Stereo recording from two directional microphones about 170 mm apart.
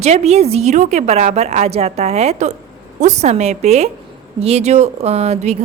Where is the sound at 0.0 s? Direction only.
40° right (ahead or behind).